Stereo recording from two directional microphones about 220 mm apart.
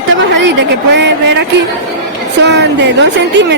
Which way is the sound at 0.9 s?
55° right (ahead or behind).